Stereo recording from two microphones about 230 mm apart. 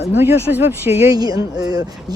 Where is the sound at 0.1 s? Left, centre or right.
Centre.